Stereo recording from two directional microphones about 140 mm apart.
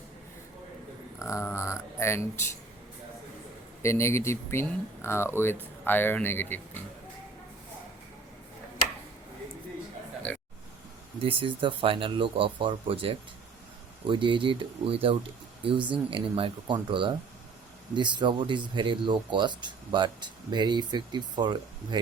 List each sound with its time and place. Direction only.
1.2 s speech: 20° left (ahead or behind)
3.8 s speech: 20° left (ahead or behind)
10.3 s speech: 10° left (ahead or behind)
11.2 s speech: 40° right (ahead or behind)